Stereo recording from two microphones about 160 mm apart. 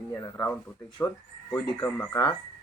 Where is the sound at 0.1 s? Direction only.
20° left (ahead or behind).